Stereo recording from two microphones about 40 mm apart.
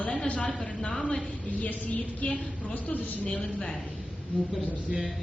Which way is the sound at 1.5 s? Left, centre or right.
Left.